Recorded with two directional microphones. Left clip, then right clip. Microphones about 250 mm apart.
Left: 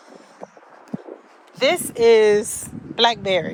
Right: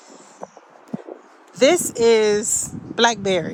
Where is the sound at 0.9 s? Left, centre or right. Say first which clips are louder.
Right 1 dB; centre.